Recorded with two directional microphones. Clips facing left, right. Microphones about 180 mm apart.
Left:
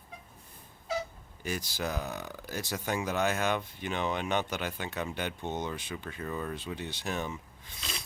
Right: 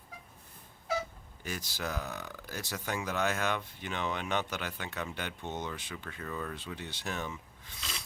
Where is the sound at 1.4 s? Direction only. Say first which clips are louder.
Left 4 dB; 15° left (ahead or behind).